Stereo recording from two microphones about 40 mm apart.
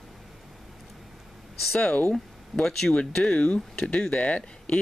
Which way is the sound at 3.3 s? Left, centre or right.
Left.